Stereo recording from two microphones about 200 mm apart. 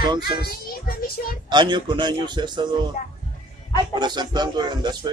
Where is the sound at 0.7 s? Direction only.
50° left (ahead or behind).